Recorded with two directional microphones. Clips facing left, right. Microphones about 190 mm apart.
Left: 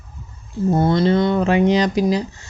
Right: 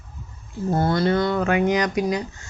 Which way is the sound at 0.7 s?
20° left (ahead or behind).